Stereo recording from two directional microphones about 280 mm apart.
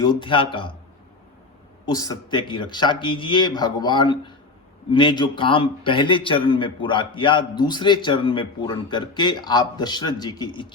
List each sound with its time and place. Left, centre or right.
0.0 s a man's voice: centre
1.9 s a man's voice: centre